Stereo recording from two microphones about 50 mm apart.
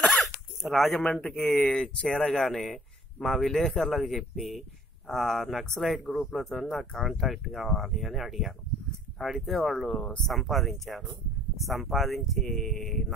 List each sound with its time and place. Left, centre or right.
0.1 s a sound: centre
0.9 s speech: centre
2.4 s speech: centre